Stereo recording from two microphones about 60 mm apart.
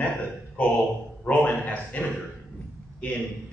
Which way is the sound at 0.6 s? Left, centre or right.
Left.